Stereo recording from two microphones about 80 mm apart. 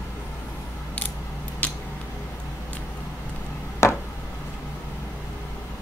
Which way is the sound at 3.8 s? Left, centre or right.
Left.